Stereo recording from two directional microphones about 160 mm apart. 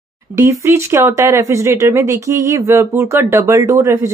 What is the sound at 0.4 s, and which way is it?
Speech, 15° right (ahead or behind).